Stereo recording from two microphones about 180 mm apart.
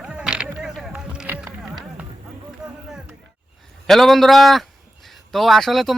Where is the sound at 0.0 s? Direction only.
5° right (ahead or behind).